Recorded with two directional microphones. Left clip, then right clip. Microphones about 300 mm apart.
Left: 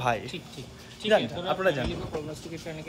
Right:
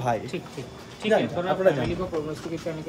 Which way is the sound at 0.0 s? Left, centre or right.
Centre.